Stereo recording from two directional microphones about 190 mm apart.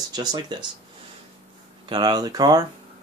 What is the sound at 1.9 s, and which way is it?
Speech, 20° right (ahead or behind).